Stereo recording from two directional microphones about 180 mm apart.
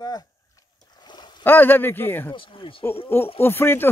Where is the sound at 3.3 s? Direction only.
15° left (ahead or behind).